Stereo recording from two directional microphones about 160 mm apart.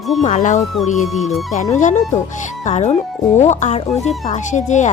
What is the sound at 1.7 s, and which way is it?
Speech, 50° left (ahead or behind).